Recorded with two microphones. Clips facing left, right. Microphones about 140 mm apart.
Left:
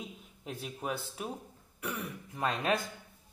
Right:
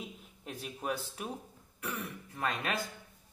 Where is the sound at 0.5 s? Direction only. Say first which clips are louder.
Even; 10° left (ahead or behind).